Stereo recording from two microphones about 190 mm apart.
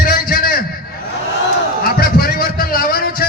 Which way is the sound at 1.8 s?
55° left (ahead or behind).